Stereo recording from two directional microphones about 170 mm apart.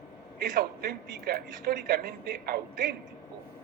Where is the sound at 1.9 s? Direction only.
65° right (ahead or behind).